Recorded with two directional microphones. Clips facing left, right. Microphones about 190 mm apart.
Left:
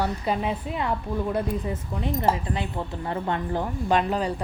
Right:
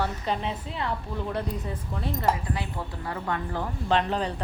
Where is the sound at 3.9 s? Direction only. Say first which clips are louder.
Left 2 dB; 10° left (ahead or behind).